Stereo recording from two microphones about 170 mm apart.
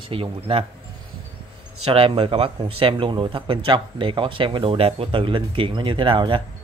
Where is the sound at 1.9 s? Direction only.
35° right (ahead or behind).